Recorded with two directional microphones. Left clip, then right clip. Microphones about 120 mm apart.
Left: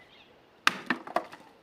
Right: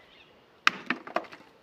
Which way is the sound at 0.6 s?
5° right (ahead or behind).